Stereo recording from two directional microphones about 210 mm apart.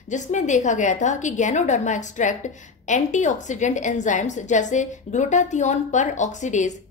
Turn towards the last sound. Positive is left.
turn(degrees=35)  # may be behind; listen again after turning